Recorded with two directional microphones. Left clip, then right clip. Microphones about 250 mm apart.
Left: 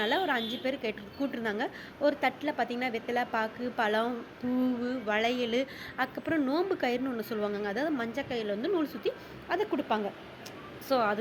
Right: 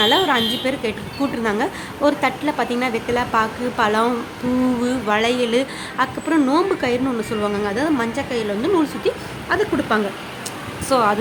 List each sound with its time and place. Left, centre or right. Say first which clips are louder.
0.0 s a woman's voice: right 13 dB; centre